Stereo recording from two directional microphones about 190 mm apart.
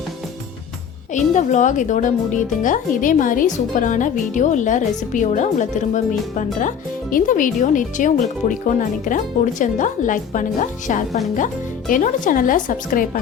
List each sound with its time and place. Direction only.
1.1 s a woman's voice: 40° left (ahead or behind)